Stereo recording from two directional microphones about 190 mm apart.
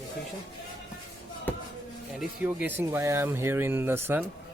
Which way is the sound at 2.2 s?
10° right (ahead or behind).